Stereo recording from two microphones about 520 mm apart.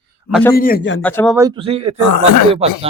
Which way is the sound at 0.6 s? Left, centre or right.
Centre.